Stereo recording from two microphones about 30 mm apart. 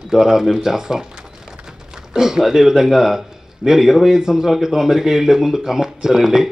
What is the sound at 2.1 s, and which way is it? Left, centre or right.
A man's voice, centre.